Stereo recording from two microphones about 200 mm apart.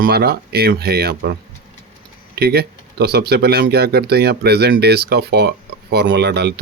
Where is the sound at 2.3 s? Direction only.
50° right (ahead or behind).